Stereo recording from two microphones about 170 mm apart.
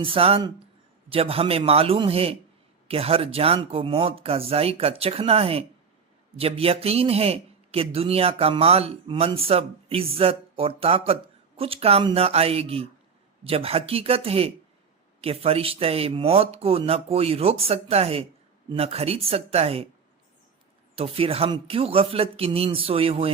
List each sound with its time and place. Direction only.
0.0 s a man's voice: 35° right (ahead or behind)
20.9 s a man's voice: 35° right (ahead or behind)